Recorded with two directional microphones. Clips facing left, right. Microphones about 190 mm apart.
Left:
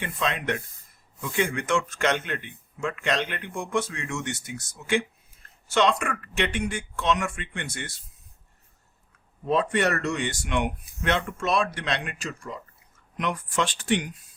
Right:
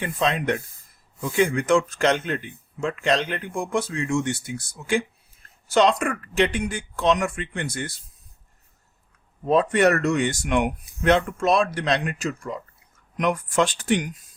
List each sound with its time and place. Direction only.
0.0 s speech: 35° right (ahead or behind)
9.5 s speech: 40° right (ahead or behind)